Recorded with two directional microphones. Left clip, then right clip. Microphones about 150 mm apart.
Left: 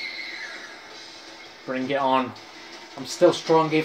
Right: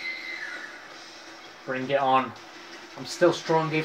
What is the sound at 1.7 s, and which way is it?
Speech, 10° left (ahead or behind).